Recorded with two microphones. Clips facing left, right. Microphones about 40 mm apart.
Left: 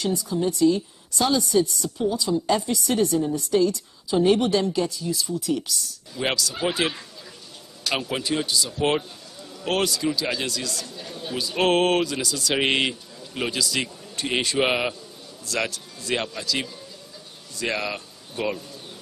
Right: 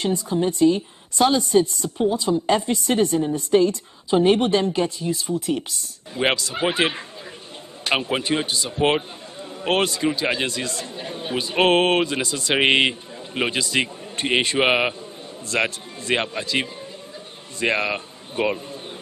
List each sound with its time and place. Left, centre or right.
0.0 s speech: right